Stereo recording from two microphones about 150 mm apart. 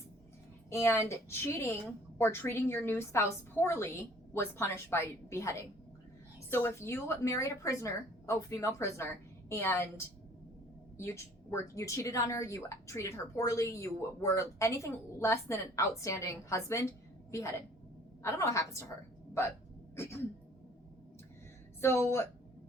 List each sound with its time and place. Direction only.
0.7 s a woman's voice: 20° left (ahead or behind)
10.9 s a woman's voice: 20° left (ahead or behind)
18.2 s a woman's voice: 20° left (ahead or behind)
20.0 s a woman's voice: 15° left (ahead or behind)
21.8 s a woman's voice: 15° left (ahead or behind)